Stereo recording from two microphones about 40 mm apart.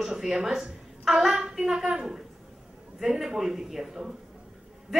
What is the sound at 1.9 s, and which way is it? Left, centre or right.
A woman's voice, centre.